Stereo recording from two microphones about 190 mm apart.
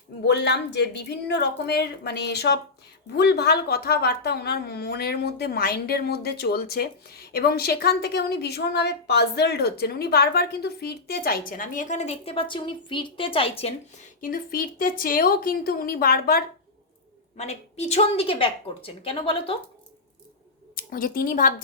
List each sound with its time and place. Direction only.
0.3 s a woman's voice: 60° left (ahead or behind); by 13.7 s 30° left (ahead or behind)
14.2 s a woman's voice: 50° left (ahead or behind)
17.3 s a woman's voice: 35° left (ahead or behind)
20.7 s a woman's voice: 50° left (ahead or behind)